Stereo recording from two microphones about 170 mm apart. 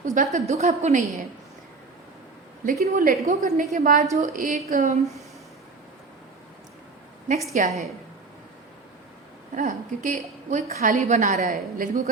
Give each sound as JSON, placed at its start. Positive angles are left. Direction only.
{"t": 0.0, "sound": "a woman's voice", "side_deg": -45}
{"t": 2.6, "sound": "a woman's voice", "side_deg": -60}
{"t": 7.6, "sound": "a woman's voice", "side_deg": -50}
{"t": 9.6, "sound": "a woman's voice", "side_deg": -50}